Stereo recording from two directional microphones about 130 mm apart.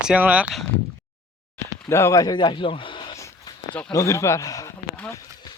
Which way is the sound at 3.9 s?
25° left (ahead or behind).